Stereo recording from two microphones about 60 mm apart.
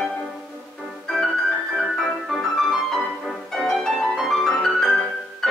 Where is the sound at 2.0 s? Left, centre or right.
Centre.